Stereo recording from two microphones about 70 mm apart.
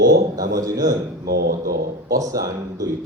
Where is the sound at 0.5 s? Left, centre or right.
Right.